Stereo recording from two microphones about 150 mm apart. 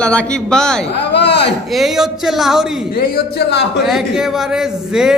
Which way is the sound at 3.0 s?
90° left.